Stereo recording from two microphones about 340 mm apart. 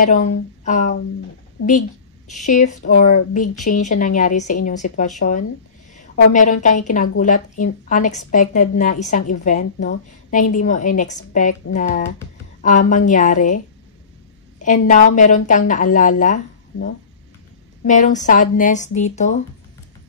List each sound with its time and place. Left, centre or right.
0.0 s a woman's voice: left
2.4 s a woman's voice: left
14.6 s a woman's voice: left
17.8 s a woman's voice: left